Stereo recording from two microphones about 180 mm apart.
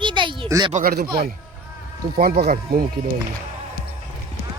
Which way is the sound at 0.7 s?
50° right (ahead or behind).